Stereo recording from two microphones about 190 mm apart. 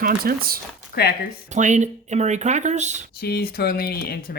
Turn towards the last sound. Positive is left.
turn(degrees=55)  # may be behind; listen again after turning